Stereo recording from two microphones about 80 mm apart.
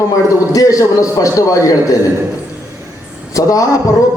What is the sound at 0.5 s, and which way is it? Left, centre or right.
A man's voice, left.